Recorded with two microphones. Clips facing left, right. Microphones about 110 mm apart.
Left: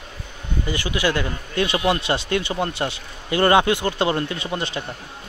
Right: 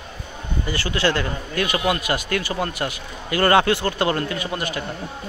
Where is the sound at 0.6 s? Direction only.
20° left (ahead or behind).